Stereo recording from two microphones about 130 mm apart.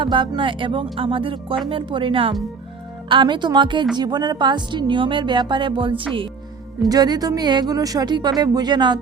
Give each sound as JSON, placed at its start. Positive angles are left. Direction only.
{"t": 0.0, "sound": "speech", "side_deg": -40}